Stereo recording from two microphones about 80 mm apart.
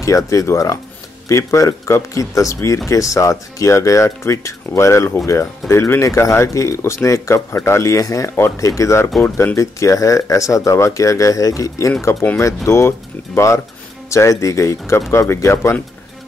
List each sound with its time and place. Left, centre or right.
0.0 s speech: left